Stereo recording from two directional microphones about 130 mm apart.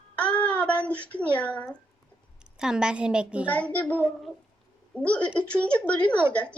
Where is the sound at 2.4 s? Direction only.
5° right (ahead or behind).